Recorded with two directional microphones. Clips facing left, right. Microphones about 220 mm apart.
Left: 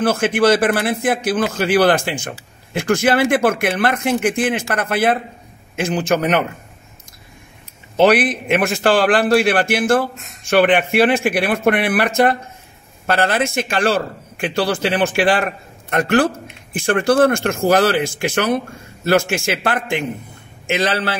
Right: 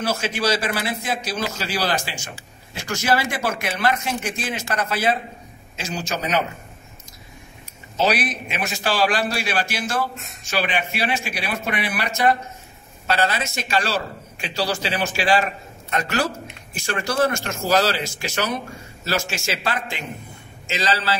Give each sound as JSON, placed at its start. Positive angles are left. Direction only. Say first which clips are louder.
{"t": 0.0, "sound": "a man's voice", "louder": "left 8 dB", "side_deg": 55}
{"t": 7.9, "sound": "a man's voice", "louder": "left 8 dB", "side_deg": 55}